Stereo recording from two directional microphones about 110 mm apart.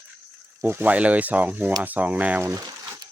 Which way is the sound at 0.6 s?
20° right (ahead or behind).